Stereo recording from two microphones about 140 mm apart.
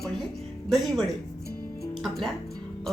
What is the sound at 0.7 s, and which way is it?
A woman's voice, centre (ahead or behind).